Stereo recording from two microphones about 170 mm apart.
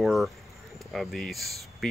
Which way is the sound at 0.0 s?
Centre (ahead or behind).